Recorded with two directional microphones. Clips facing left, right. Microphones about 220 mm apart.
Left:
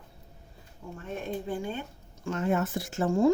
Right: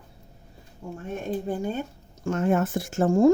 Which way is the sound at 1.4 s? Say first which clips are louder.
Right 5 dB; 40° right (ahead or behind).